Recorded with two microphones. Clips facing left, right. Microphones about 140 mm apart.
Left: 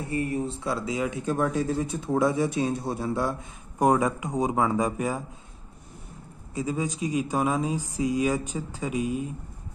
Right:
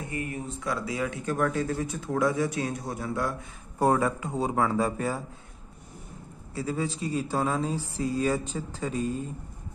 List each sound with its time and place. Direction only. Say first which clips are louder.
0.1 s speech: left 8 dB; 30° left (ahead or behind); by 5.2 s 15° left (ahead or behind)
6.5 s speech: left 2 dB; 15° left (ahead or behind)